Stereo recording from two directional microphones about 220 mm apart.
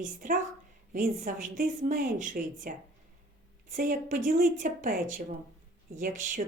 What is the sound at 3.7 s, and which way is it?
Speech, 35° right (ahead or behind).